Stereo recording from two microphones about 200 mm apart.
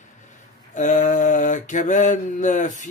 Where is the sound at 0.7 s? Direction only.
40° left (ahead or behind).